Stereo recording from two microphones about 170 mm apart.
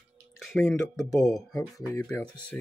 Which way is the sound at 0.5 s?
5° left (ahead or behind).